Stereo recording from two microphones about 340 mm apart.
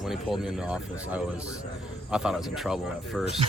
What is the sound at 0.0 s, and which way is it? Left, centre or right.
A man's voice, centre.